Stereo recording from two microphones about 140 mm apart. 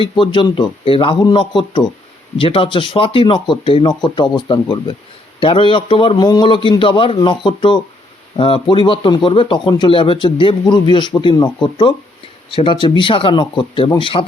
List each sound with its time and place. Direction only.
0.0 s speech: 35° left (ahead or behind)